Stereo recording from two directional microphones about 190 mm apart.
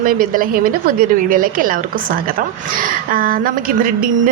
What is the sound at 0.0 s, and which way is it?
A woman's voice, 50° right (ahead or behind).